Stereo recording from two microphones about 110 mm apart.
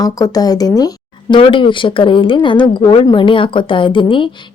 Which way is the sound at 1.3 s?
50° left (ahead or behind).